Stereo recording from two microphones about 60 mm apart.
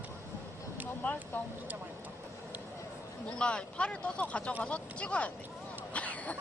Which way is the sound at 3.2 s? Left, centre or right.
Centre.